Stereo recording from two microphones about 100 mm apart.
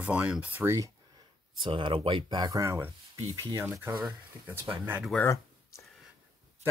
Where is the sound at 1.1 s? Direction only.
55° right (ahead or behind).